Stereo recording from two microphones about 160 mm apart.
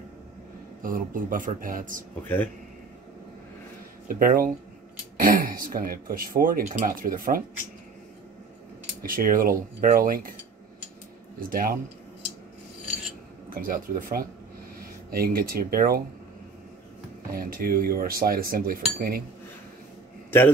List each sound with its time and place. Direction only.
0.8 s speech: 60° right (ahead or behind)
2.2 s speech: 10° left (ahead or behind)
4.2 s speech: 60° right (ahead or behind)
9.0 s speech: 60° right (ahead or behind)
11.3 s speech: 60° right (ahead or behind)
13.5 s speech: 60° right (ahead or behind)
17.3 s cutlery: 65° right (ahead or behind)
20.2 s a sound: 15° left (ahead or behind)